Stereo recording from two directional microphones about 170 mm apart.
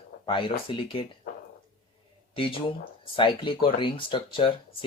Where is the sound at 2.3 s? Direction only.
30° left (ahead or behind).